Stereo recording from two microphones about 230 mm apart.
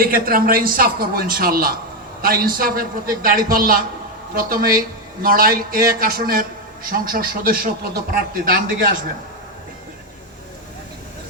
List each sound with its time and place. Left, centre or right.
0.0 s a man's voice: right